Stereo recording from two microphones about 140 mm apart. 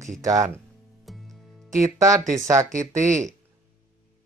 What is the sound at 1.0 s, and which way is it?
Music, centre (ahead or behind).